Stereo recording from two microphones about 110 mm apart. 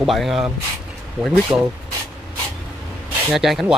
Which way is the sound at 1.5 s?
25° right (ahead or behind).